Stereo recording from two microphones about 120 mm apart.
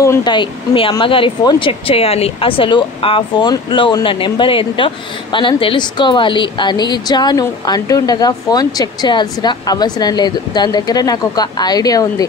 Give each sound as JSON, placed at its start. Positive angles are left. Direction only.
{"t": 0.2, "sound": "speech", "side_deg": 40}
{"t": 1.7, "sound": "a woman's voice", "side_deg": 55}